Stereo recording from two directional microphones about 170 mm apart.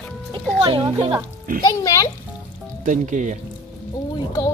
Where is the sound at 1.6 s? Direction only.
20° left (ahead or behind).